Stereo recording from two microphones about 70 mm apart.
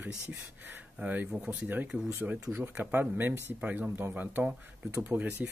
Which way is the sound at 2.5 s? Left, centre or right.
Right.